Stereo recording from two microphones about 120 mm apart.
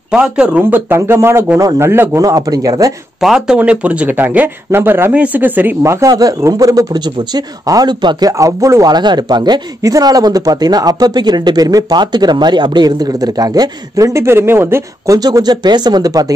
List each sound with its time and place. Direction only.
0.1 s speech: 10° right (ahead or behind); by 2.9 s 30° right (ahead or behind)
3.2 s speech: 5° right (ahead or behind); by 15.1 s 20° right (ahead or behind)
15.1 s speech: 35° right (ahead or behind)